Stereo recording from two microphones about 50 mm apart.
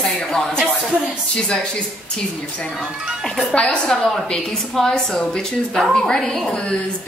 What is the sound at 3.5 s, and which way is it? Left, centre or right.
Speech, left.